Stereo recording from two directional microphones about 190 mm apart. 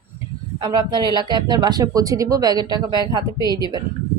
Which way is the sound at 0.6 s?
25° right (ahead or behind).